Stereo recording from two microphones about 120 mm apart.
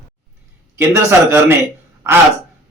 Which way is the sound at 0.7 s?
20° right (ahead or behind).